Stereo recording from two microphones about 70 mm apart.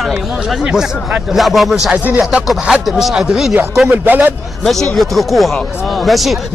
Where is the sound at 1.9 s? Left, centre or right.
Right.